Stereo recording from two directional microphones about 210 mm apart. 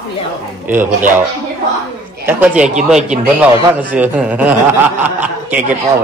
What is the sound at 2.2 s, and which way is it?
Speech, 10° right (ahead or behind).